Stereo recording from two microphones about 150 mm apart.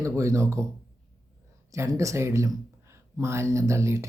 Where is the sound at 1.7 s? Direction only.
20° right (ahead or behind).